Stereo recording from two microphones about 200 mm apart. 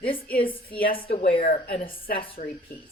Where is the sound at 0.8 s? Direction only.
45° left (ahead or behind).